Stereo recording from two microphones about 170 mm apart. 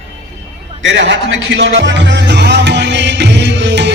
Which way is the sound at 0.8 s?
90° right.